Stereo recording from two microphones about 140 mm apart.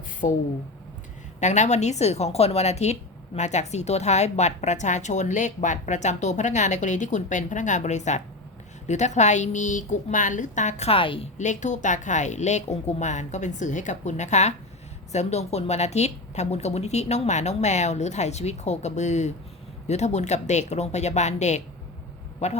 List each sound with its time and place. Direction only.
0.2 s a woman's voice: 65° left (ahead or behind); by 11.3 s 40° left (ahead or behind)
11.3 s a woman's voice: 60° left (ahead or behind)